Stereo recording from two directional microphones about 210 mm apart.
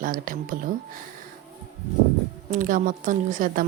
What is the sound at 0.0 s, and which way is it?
Speech, 40° right (ahead or behind).